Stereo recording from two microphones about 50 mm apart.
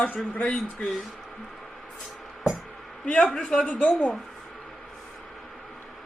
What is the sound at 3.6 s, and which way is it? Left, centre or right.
Speech, left.